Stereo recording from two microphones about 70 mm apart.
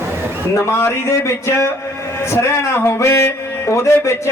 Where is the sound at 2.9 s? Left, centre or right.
Left.